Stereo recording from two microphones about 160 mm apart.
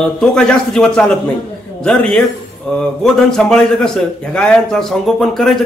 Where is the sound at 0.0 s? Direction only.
5° left (ahead or behind).